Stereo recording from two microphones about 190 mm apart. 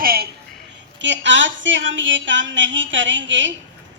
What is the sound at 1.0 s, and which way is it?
A woman's voice, 70° right (ahead or behind).